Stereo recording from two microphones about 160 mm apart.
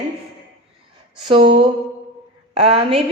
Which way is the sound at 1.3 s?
35° right (ahead or behind).